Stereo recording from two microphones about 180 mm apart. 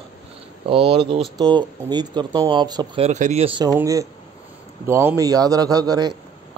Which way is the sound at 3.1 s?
40° right (ahead or behind).